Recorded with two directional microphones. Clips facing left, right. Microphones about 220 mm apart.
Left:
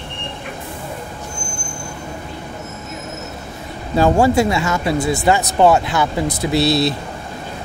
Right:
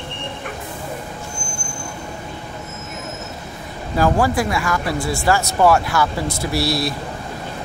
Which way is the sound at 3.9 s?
25° left (ahead or behind).